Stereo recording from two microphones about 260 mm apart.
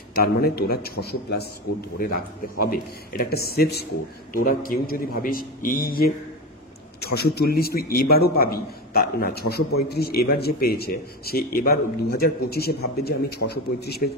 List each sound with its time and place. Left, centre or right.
0.2 s speech: left